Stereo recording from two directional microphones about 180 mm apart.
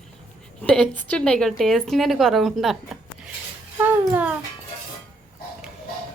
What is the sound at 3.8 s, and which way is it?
Speech, 10° right (ahead or behind).